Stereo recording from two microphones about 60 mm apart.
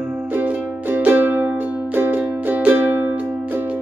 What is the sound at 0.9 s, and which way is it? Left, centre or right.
Music, right.